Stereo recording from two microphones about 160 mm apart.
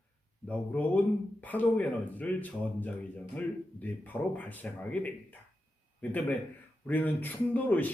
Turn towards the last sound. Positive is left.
turn(degrees=10)  # may be behind; listen again after turning